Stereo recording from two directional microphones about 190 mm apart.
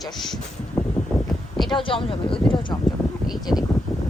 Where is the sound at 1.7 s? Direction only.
25° left (ahead or behind).